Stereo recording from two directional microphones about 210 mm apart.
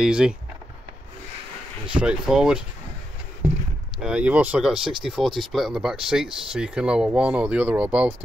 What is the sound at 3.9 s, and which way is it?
Speech, 5° right (ahead or behind).